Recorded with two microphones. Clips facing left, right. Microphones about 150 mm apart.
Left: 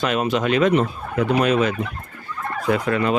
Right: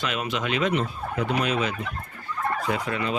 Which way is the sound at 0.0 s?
40° left (ahead or behind).